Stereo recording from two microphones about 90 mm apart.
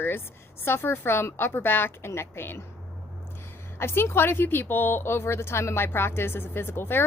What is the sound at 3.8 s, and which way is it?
A woman's voice, 25° left (ahead or behind).